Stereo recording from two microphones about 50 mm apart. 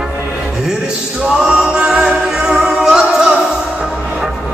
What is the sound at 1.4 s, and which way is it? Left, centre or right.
Music, centre.